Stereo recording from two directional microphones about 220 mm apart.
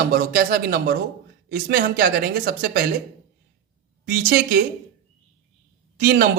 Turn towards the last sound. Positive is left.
turn(degrees=-45)  # may be behind; listen again after turning